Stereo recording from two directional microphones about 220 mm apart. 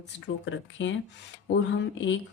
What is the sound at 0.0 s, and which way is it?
Speech, 60° left (ahead or behind).